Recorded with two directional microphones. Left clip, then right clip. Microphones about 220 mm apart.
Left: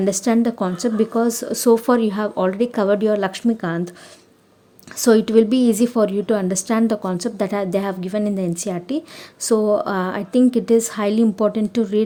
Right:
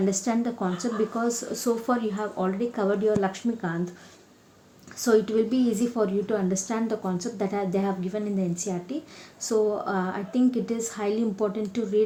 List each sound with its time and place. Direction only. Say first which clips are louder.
0.0 s a woman's voice: left 8 dB; 45° left (ahead or behind)
4.9 s a woman's voice: left 8 dB; 45° left (ahead or behind)